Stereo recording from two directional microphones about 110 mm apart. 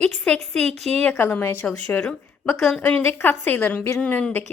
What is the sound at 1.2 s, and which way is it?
A woman's voice, 20° left (ahead or behind).